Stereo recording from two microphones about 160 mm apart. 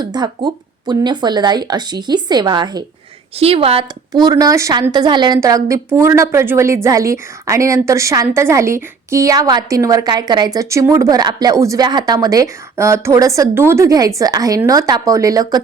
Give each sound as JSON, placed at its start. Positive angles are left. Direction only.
{"t": 0.0, "sound": "a woman's voice", "side_deg": -25}
{"t": 3.3, "sound": "speech", "side_deg": -35}
{"t": 4.1, "sound": "a woman's voice", "side_deg": -25}